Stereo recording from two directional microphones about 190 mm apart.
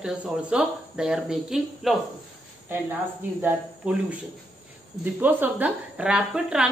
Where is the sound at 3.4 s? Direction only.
10° right (ahead or behind).